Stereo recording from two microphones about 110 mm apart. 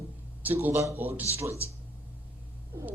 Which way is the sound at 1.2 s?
65° right (ahead or behind).